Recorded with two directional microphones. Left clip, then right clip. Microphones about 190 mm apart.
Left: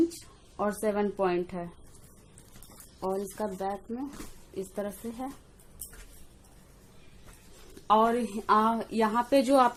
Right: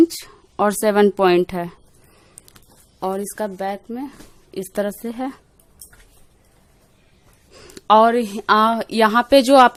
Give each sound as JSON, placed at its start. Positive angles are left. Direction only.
{"t": 0.5, "sound": "a woman's voice", "side_deg": -50}
{"t": 3.0, "sound": "speech", "side_deg": -55}
{"t": 7.8, "sound": "speech", "side_deg": -65}